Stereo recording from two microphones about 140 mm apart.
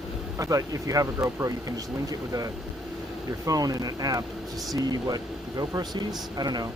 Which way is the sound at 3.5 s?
25° right (ahead or behind).